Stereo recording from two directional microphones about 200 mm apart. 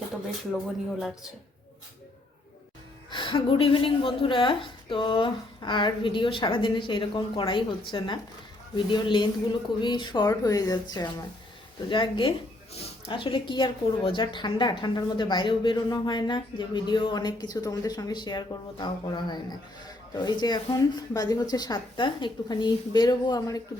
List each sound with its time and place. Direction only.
0.3 s speech: centre (ahead or behind)
3.1 s a woman's voice: 25° left (ahead or behind)